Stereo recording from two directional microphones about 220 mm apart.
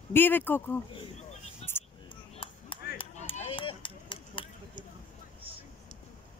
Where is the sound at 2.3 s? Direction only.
25° left (ahead or behind).